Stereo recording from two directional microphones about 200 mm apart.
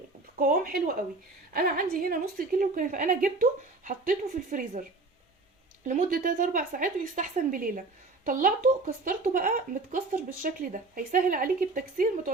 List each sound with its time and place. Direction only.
0.3 s a woman's voice: 45° right (ahead or behind)
5.9 s a woman's voice: 45° right (ahead or behind)